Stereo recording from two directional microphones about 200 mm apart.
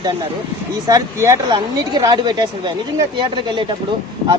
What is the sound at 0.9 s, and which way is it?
Speech, 15° right (ahead or behind).